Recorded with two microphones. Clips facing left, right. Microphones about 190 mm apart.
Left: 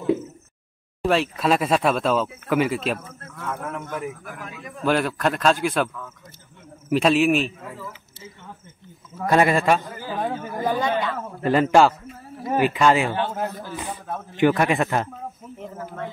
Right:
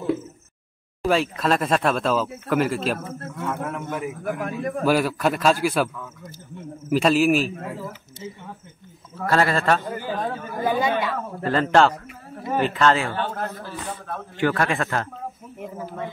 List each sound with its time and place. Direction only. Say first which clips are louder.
1.0 s speech: left 1 dB; centre (ahead or behind)
3.0 s a man's voice: right 8 dB; 55° right (ahead or behind)
3.4 s speech: right 2 dB; centre (ahead or behind)
4.2 s a man's voice: right 11 dB; 55° right (ahead or behind)
4.8 s speech: even; 5° right (ahead or behind)
9.1 s a man's voice: left 2 dB; 15° left (ahead or behind)
10.6 s speech: right 1 dB; 10° right (ahead or behind)
11.4 s a man's voice: left 2 dB; 10° left (ahead or behind)
15.6 s speech: right 1 dB; 10° right (ahead or behind)